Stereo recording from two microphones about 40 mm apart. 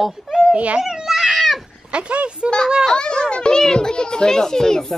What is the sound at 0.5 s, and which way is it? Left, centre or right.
Speech, right.